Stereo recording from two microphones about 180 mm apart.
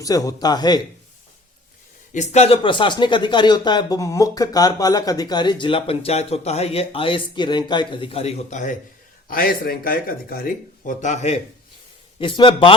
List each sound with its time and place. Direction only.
0.0 s speech: 20° left (ahead or behind)
2.1 s speech: 40° left (ahead or behind)
9.3 s speech: 55° left (ahead or behind)
12.2 s speech: 25° left (ahead or behind)